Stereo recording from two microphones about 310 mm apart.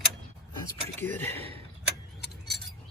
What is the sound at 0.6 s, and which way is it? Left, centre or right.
Speech, centre.